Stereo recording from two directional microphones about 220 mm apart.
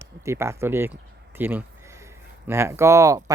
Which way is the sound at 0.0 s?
10° right (ahead or behind).